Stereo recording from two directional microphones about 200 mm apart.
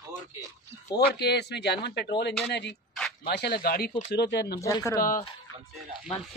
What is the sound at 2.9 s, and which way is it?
Dog, centre (ahead or behind).